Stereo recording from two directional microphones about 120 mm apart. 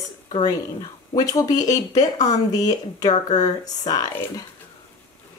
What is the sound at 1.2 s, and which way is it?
Speech, 30° left (ahead or behind).